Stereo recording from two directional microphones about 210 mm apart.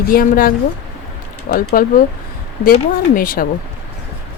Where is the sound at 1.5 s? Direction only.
45° left (ahead or behind).